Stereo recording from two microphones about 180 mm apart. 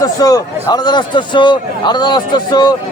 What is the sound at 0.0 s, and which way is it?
A man's voice, 20° left (ahead or behind).